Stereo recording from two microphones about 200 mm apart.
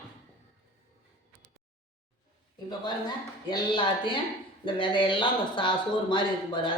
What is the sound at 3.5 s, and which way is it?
A man's voice, 20° left (ahead or behind).